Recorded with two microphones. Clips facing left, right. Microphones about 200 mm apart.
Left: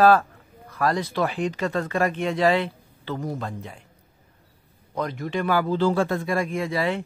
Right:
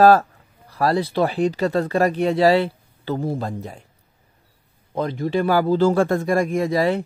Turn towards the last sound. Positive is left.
turn(degrees=-40)  # may be behind; listen again after turning